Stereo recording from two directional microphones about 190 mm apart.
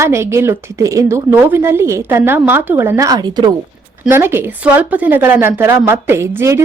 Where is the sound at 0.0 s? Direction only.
15° right (ahead or behind).